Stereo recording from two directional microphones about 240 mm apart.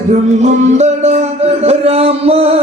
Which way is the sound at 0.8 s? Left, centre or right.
Right.